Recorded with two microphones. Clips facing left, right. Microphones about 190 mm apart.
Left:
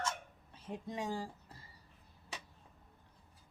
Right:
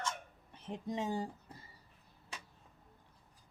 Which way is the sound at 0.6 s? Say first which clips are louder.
Right 2 dB; 20° right (ahead or behind).